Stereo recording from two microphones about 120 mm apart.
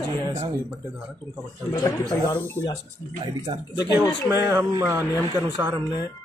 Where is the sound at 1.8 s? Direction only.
30° left (ahead or behind).